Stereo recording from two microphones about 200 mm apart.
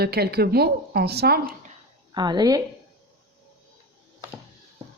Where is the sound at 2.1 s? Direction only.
20° right (ahead or behind).